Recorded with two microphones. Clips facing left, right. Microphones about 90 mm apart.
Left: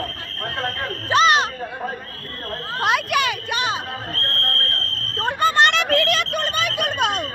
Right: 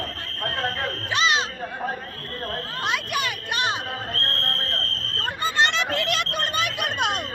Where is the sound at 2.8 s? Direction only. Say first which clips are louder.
Left 8 dB; 65° left (ahead or behind); by 3.4 s 85° left.